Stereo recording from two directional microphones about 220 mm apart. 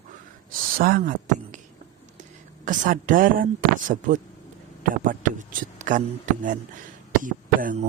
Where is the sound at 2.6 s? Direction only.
35° right (ahead or behind).